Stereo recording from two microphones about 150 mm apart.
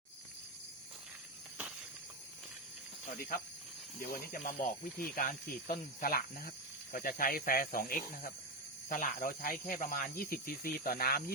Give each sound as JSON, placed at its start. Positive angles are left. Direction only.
{"t": 4.0, "sound": "speech", "side_deg": 70}
{"t": 6.0, "sound": "speech", "side_deg": 70}